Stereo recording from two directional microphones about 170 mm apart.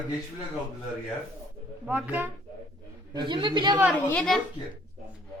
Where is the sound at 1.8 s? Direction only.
10° right (ahead or behind).